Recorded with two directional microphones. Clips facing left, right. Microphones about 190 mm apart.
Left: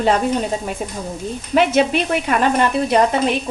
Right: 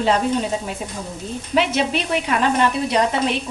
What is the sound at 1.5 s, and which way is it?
A woman's voice, 50° left (ahead or behind).